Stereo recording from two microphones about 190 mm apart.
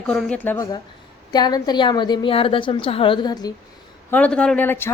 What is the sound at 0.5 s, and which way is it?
A woman's voice, 20° left (ahead or behind).